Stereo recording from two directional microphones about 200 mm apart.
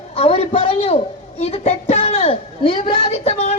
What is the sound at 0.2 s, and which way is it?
A woman's voice, 30° left (ahead or behind).